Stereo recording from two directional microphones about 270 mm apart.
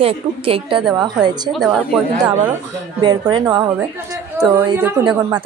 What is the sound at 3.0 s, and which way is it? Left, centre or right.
Speech, centre.